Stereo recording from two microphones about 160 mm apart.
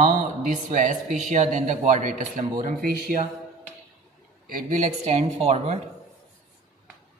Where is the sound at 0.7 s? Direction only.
55° right (ahead or behind).